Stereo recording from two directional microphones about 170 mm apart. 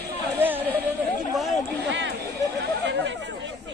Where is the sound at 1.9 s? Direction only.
90° right.